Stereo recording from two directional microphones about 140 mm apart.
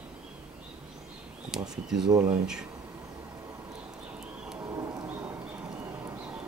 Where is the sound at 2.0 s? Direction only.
30° right (ahead or behind).